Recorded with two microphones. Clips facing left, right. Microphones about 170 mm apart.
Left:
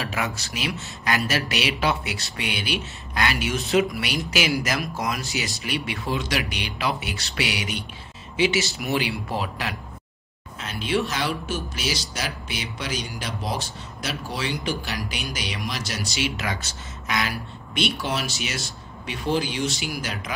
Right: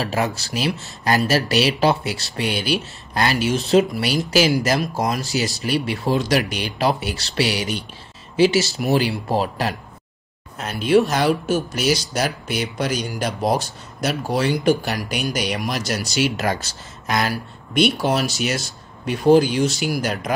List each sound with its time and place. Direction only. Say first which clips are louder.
0.0 s speech: right 6 dB; 35° right (ahead or behind)